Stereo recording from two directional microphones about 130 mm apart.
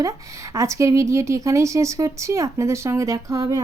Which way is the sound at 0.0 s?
25° right (ahead or behind).